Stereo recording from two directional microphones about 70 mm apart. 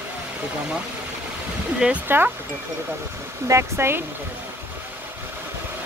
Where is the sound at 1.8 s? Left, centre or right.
Centre.